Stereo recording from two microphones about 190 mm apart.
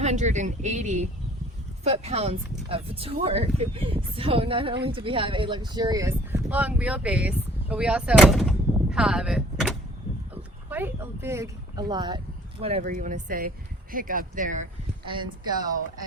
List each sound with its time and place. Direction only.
0.0 s speech: 35° right (ahead or behind); by 9.7 s 5° right (ahead or behind)
10.7 s a sound: 10° right (ahead or behind); by 12.8 s 30° right (ahead or behind)
12.8 s speech: 45° right (ahead or behind)
15.0 s speech: 25° right (ahead or behind)